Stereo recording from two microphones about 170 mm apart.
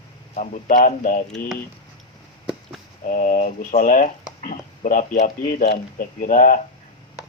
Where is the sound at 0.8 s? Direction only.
50° left (ahead or behind).